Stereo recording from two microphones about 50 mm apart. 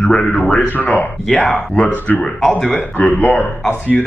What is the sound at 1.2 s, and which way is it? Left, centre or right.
Speech, centre.